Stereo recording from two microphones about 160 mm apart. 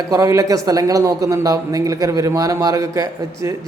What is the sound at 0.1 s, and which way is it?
Speech, 20° right (ahead or behind).